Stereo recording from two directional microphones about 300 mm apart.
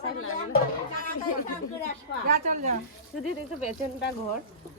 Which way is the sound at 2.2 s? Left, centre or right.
Right.